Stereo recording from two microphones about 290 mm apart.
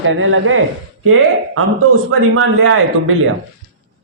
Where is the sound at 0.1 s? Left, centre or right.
Right.